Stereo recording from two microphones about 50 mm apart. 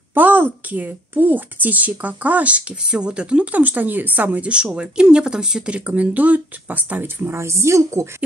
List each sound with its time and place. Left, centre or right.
0.1 s a woman's voice: right
2.8 s speech: centre
3.5 s a woman's voice: right
4.4 s speech: right
7.2 s a woman's voice: right